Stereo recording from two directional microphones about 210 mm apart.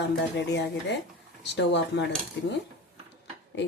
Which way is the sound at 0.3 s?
55° left (ahead or behind).